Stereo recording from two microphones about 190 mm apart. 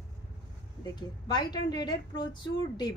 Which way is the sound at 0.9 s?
25° left (ahead or behind).